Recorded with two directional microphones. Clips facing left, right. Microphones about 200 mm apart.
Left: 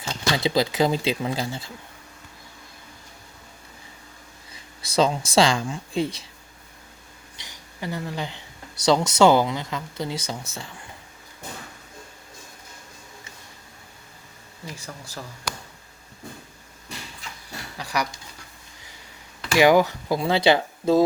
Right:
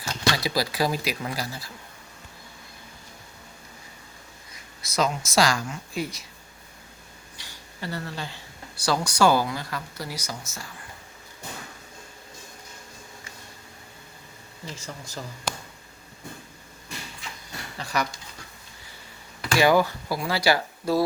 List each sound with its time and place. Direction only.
0.0 s speech: 25° left (ahead or behind)
4.5 s speech: 30° left (ahead or behind)
7.3 s speech: 20° left (ahead or behind)
14.7 s speech: 10° left (ahead or behind)
17.7 s speech: 10° left (ahead or behind)
19.5 s speech: 15° left (ahead or behind)